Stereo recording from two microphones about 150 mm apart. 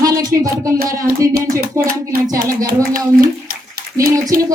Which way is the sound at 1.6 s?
80° right.